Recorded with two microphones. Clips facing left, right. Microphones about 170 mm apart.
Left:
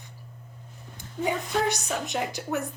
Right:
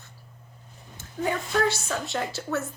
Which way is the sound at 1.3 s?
15° left (ahead or behind).